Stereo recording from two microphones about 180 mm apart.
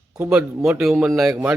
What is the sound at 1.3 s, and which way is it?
Speech, 15° right (ahead or behind).